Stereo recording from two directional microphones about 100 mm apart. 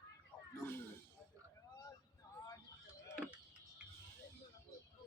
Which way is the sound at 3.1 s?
10° right (ahead or behind).